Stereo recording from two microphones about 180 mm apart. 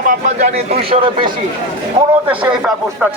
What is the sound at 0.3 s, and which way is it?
Speech, 35° right (ahead or behind).